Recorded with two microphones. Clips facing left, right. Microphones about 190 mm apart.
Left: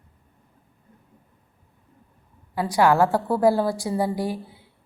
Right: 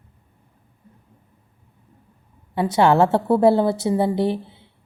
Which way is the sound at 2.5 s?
25° right (ahead or behind).